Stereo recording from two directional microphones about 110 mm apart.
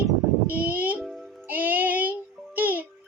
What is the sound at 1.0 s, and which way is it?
Music, centre (ahead or behind).